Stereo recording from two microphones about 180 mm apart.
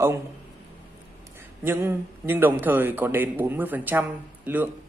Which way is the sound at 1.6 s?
10° right (ahead or behind).